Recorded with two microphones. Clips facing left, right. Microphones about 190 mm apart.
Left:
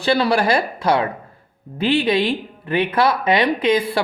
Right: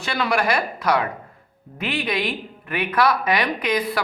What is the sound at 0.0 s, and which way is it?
A woman's voice, 30° left (ahead or behind).